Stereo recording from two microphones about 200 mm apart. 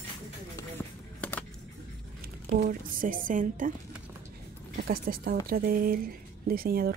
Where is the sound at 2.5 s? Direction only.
45° right (ahead or behind).